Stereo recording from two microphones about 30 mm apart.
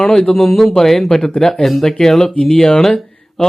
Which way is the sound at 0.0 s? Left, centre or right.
Centre.